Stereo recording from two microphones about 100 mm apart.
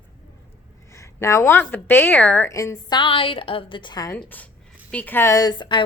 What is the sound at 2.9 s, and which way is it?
A woman's voice, 55° left (ahead or behind).